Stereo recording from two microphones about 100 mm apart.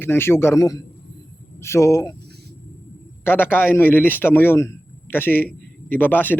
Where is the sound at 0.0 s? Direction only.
25° left (ahead or behind).